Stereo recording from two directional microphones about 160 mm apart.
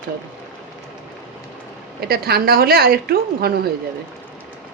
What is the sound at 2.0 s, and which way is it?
A woman's voice, 75° right (ahead or behind).